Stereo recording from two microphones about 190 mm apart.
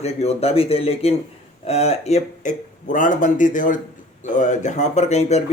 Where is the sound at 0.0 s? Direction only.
35° left (ahead or behind).